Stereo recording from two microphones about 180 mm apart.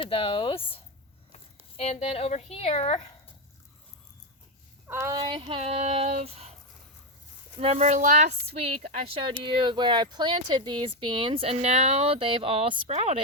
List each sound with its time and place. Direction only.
0.0 s a woman's voice: 30° left (ahead or behind)
4.9 s speech: 15° right (ahead or behind); by 6.5 s 35° right (ahead or behind)
7.6 s speech: 35° right (ahead or behind)